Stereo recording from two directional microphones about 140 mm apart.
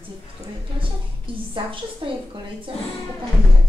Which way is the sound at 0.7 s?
40° right (ahead or behind).